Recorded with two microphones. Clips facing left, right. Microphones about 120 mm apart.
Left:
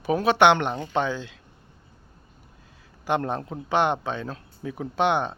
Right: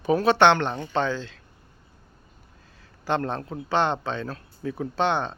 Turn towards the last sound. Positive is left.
turn(degrees=15)  # may be behind; listen again after turning